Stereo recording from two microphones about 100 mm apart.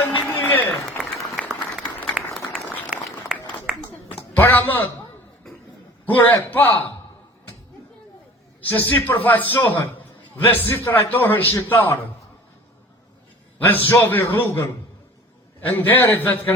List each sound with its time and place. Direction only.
0.0 s applause: 20° left (ahead or behind)
1.0 s applause: centre (ahead or behind)
2.1 s a sound: 5° right (ahead or behind)
4.4 s a sound: 20° left (ahead or behind)
6.1 s a man's voice: 20° left (ahead or behind)
8.7 s a man's voice: 20° left (ahead or behind)
13.8 s a man's voice: 20° left (ahead or behind)
15.6 s a man's voice: 20° left (ahead or behind)